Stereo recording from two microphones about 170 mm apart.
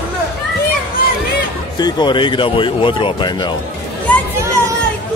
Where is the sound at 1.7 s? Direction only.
25° left (ahead or behind).